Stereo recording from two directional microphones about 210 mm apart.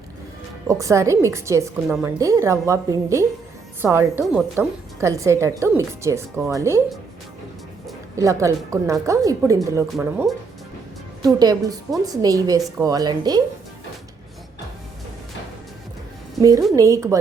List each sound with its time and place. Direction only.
0.7 s a woman's voice: 15° right (ahead or behind)
1.9 s speech: 5° right (ahead or behind)
2.1 s a woman's voice: 15° right (ahead or behind)
8.1 s a woman's voice: 15° right (ahead or behind)
16.4 s a woman's voice: 15° right (ahead or behind)